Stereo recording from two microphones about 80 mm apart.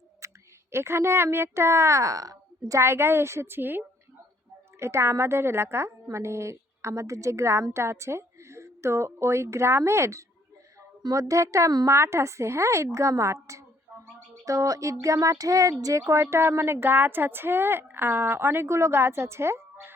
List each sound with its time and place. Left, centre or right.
0.2 s a sound: right
0.7 s a woman's voice: right
11.1 s music: right
11.9 s a woman's voice: right
13.9 s a sound: right
14.4 s music: right
15.8 s a woman's voice: right